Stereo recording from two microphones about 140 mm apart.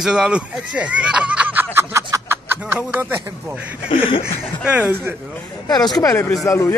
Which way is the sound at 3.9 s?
40° left (ahead or behind).